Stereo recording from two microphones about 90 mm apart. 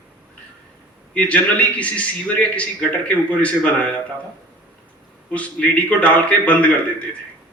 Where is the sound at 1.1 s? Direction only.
15° left (ahead or behind).